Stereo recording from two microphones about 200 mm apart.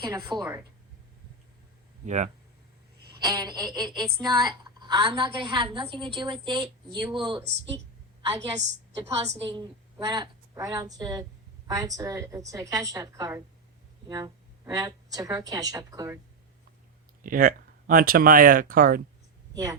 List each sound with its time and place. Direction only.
0.0 s a woman's voice: 20° right (ahead or behind)
2.0 s a woman's voice: 35° right (ahead or behind)
3.2 s a woman's voice: 20° right (ahead or behind)
7.4 s a woman's voice: 60° right (ahead or behind)
9.0 s a woman's voice: 30° right (ahead or behind)
9.6 s a woman's voice: 20° right (ahead or behind)
17.2 s speech: 45° right (ahead or behind)